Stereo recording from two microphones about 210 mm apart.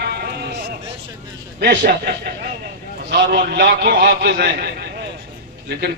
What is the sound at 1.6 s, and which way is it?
Speech, 50° right (ahead or behind).